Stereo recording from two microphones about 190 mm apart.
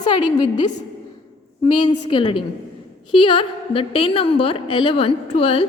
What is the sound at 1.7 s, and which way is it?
A woman's voice, 25° left (ahead or behind).